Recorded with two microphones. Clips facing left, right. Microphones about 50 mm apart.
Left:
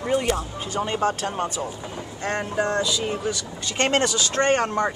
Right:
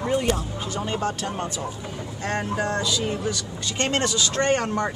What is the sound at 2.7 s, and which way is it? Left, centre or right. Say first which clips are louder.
Speech: left 1 dB; centre.